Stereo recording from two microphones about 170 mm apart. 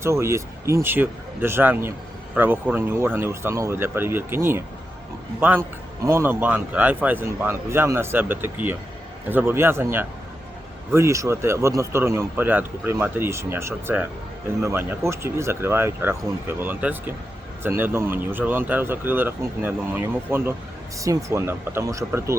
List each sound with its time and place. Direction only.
0.0 s a man's voice: 15° right (ahead or behind)